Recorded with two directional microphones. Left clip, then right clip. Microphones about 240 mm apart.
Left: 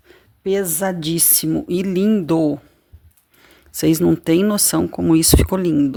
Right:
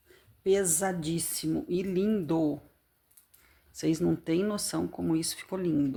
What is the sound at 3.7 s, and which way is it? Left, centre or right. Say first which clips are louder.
Speech: left 13 dB; left.